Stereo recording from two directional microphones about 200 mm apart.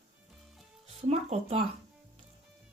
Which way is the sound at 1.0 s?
35° right (ahead or behind).